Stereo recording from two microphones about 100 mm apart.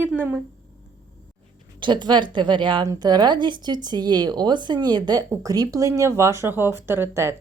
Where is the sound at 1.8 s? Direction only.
50° right (ahead or behind); by 7.4 s 25° right (ahead or behind).